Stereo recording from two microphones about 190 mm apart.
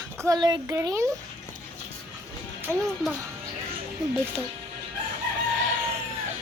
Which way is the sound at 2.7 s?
10° right (ahead or behind).